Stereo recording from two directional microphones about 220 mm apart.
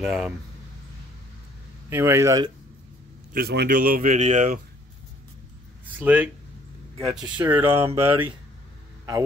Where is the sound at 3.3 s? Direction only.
45° right (ahead or behind).